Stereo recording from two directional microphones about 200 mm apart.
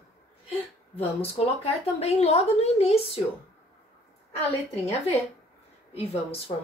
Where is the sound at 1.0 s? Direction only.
30° left (ahead or behind).